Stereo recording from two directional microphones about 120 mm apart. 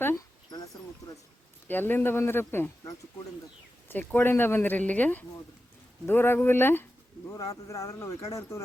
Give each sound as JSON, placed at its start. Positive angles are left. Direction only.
{"t": 1.6, "sound": "speech", "side_deg": 15}